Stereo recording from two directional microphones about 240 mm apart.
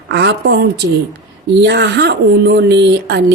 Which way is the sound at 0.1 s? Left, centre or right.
Right.